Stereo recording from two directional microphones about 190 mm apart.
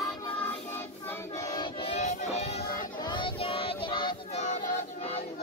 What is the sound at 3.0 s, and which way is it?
Child singing, 25° left (ahead or behind).